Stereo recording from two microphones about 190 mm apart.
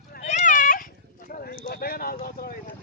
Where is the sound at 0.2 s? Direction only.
40° left (ahead or behind).